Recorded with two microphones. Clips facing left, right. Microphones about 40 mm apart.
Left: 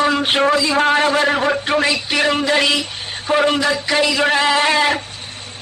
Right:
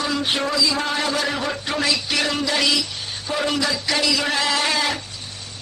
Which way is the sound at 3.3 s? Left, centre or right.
Left.